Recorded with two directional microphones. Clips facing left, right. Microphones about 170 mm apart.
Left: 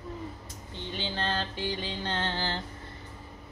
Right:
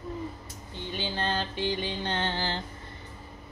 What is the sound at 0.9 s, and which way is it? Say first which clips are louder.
Music: right 2 dB; 10° right (ahead or behind).